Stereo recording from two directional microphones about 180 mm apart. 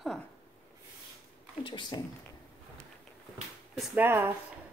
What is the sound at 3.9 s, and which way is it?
Speech, 10° right (ahead or behind).